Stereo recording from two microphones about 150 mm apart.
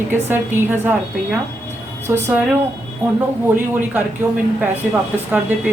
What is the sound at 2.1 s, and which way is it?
Speech, 15° right (ahead or behind).